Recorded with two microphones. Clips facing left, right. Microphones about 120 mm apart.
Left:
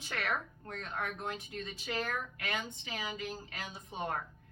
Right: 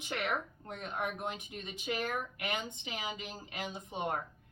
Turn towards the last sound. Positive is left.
turn(degrees=-20)  # may be behind; listen again after turning